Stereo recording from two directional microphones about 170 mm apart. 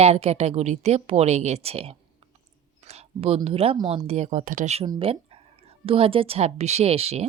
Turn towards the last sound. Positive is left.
turn(degrees=-35)  # may be behind; listen again after turning